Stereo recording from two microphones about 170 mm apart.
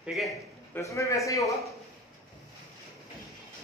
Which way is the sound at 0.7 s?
20° left (ahead or behind).